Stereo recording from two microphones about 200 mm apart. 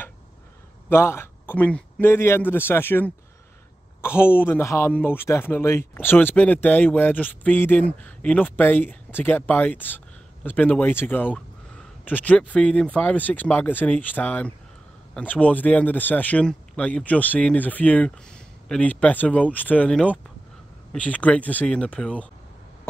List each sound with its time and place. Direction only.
0.8 s speech: 10° left (ahead or behind)
4.3 s speech: 10° left (ahead or behind)